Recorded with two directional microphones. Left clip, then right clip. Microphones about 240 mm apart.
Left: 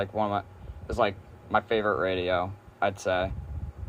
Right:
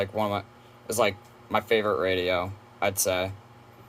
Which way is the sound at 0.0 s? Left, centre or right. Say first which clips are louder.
Right 1 dB; centre.